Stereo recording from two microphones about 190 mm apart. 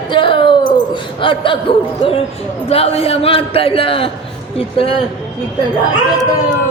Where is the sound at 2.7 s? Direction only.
30° left (ahead or behind).